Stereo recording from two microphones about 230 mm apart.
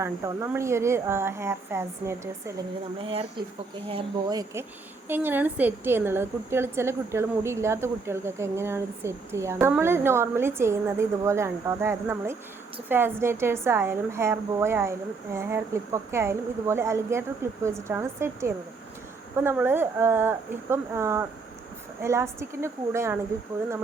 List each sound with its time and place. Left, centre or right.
0.0 s a woman's voice: centre
3.0 s a woman's voice: right